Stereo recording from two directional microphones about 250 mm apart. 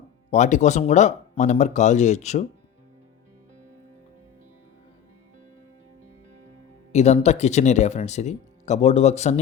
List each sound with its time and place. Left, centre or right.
0.3 s speech: left
6.9 s speech: left